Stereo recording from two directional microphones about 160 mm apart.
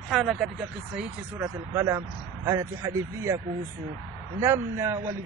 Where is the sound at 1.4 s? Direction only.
15° right (ahead or behind).